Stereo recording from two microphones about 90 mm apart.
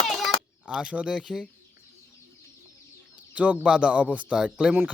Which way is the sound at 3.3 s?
15° right (ahead or behind).